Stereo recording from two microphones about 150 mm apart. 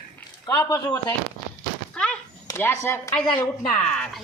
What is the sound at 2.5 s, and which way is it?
Speech, 15° left (ahead or behind).